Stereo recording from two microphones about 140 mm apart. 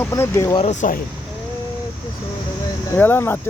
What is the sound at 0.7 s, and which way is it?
Speech, 60° left (ahead or behind).